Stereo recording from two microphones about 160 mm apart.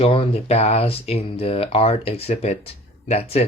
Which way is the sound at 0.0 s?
35° left (ahead or behind).